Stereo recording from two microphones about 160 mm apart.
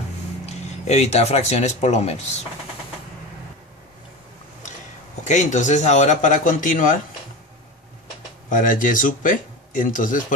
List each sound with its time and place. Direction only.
0.5 s speech: 45° left (ahead or behind)
5.2 s a man's voice: 50° left (ahead or behind)
8.5 s speech: 55° left (ahead or behind)